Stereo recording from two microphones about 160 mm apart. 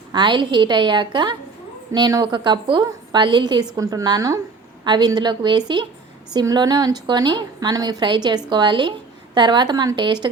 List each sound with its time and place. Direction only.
0.1 s a woman's voice: 30° right (ahead or behind)